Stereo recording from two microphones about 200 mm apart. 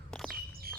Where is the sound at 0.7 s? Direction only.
50° right (ahead or behind).